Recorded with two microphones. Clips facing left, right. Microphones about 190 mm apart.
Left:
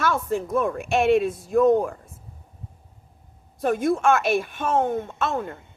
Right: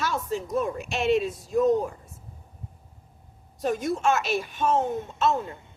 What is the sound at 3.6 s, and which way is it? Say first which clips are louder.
A woman's voice: left 4 dB; 55° left (ahead or behind).